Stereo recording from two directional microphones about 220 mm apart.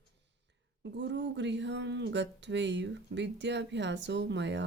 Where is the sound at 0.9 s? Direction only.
55° right (ahead or behind).